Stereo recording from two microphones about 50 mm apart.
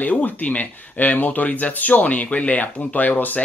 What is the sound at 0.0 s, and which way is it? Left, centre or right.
Speech, left.